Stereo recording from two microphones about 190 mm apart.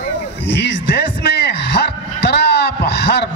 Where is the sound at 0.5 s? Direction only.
65° left (ahead or behind).